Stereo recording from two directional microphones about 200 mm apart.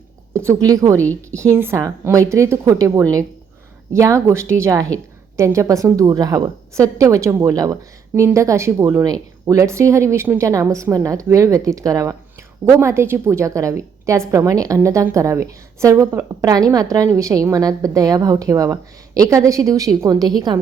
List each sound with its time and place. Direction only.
0.3 s a woman's voice: 15° right (ahead or behind)